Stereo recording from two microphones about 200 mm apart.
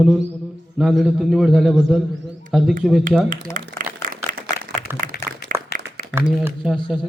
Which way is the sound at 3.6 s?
40° right (ahead or behind).